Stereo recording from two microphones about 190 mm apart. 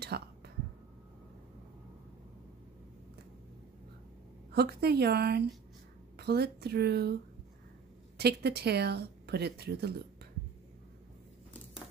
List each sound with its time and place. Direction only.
0.1 s speech: 55° right (ahead or behind)
4.5 s speech: 60° right (ahead or behind)
8.2 s speech: 60° right (ahead or behind)